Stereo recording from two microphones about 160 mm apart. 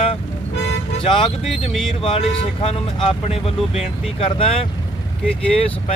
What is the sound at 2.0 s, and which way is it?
Speech, 35° left (ahead or behind).